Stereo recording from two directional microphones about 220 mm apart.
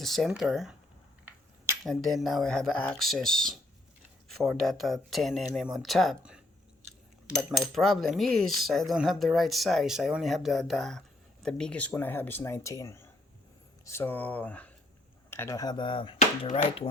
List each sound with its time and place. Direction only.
0.0 s speech: centre (ahead or behind)
1.8 s speech: centre (ahead or behind); by 16.9 s 25° left (ahead or behind)